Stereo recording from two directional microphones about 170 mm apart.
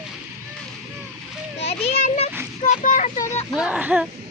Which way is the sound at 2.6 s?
50° left (ahead or behind).